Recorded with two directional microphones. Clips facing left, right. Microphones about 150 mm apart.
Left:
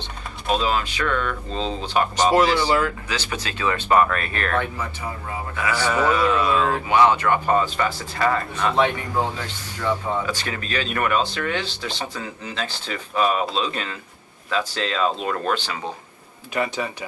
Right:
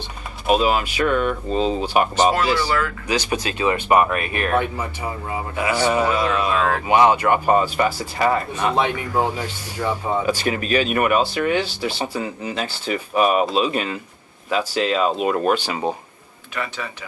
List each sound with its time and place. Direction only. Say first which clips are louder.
0.0 s speech: right 4 dB; 15° right (ahead or behind)
2.3 s speech: left 2 dB; 15° left (ahead or behind)
3.1 s a man's voice: right 6 dB; 15° right (ahead or behind)
16.5 s speech: left 4 dB; 20° left (ahead or behind)